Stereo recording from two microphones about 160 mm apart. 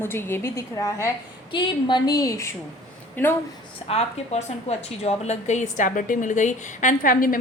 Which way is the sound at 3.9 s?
40° left (ahead or behind).